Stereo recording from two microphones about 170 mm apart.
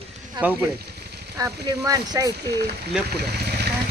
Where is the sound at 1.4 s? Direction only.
20° right (ahead or behind).